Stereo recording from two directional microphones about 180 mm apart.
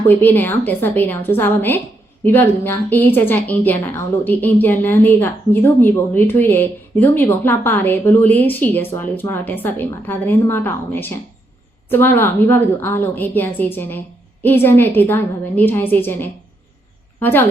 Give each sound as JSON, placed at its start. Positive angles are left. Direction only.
{"t": 0.1, "sound": "a woman's voice", "side_deg": 10}